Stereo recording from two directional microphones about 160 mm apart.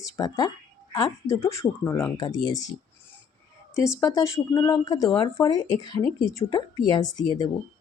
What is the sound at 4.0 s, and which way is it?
Speech, 20° left (ahead or behind).